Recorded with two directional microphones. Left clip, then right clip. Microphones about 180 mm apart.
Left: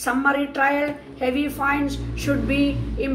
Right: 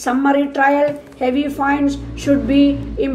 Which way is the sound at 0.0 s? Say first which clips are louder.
Right 5 dB; 40° right (ahead or behind).